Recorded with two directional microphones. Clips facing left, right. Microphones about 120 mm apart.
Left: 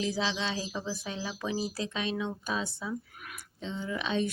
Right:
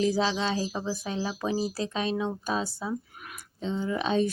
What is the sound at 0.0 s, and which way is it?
Speech, 40° right (ahead or behind).